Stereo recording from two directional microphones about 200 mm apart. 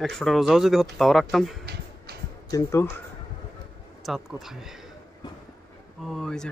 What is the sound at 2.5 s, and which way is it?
Speech, 15° left (ahead or behind).